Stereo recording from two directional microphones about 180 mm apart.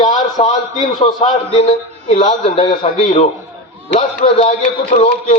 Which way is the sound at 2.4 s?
30° left (ahead or behind).